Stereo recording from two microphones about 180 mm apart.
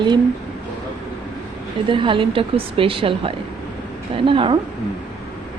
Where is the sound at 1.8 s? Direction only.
30° right (ahead or behind).